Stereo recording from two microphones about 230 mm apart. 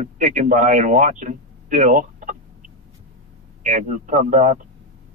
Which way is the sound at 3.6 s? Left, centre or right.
Right.